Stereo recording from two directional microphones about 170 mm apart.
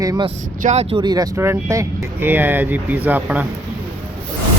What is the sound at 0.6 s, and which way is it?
Speech, 40° right (ahead or behind).